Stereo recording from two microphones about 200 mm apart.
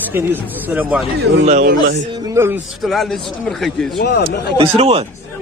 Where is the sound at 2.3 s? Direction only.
10° right (ahead or behind).